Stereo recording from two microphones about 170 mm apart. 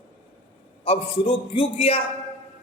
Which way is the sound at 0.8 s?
35° left (ahead or behind).